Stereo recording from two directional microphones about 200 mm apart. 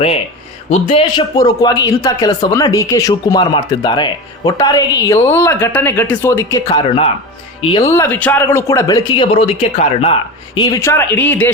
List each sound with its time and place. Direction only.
0.7 s a man's voice: 30° left (ahead or behind); by 6.6 s 10° left (ahead or behind)
6.7 s speech: 25° left (ahead or behind)
7.9 s a man's voice: 15° left (ahead or behind)
10.8 s a man's voice: 15° left (ahead or behind)